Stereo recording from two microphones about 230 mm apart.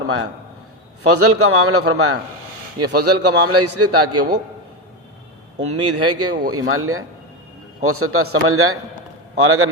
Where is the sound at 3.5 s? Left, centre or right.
Right.